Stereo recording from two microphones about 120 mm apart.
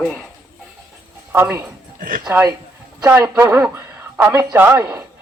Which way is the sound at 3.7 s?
20° right (ahead or behind).